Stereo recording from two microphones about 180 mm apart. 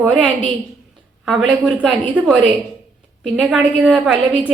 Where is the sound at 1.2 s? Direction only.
Centre (ahead or behind).